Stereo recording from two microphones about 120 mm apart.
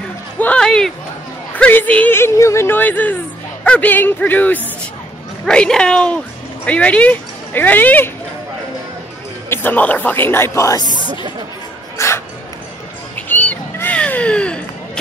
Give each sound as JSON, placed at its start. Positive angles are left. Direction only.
{"t": 0.4, "sound": "a sound", "side_deg": 10}
{"t": 1.5, "sound": "speech", "side_deg": 15}
{"t": 9.5, "sound": "speech", "side_deg": 15}
{"t": 10.9, "sound": "speech", "side_deg": -40}
{"t": 12.0, "sound": "dog", "side_deg": 25}
{"t": 13.3, "sound": "cat", "side_deg": 15}